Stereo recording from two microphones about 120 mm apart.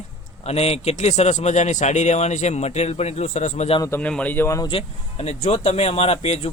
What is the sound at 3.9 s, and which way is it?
Speech, 10° left (ahead or behind).